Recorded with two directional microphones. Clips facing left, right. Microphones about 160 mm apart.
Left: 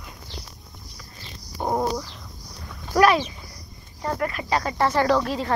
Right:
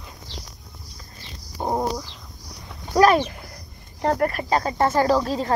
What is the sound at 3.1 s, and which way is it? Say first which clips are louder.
Speech: right 4 dB; 60° right (ahead or behind).